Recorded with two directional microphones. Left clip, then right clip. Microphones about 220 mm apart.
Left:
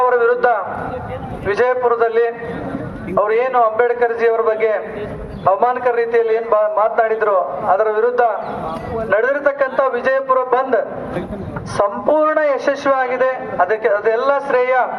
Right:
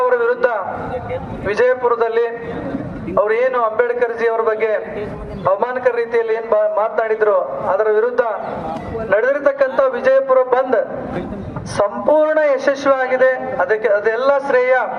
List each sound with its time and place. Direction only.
0.0 s a sound: 40° right (ahead or behind)
1.5 s a man's voice: 40° right (ahead or behind)
11.8 s a man's voice: 40° right (ahead or behind)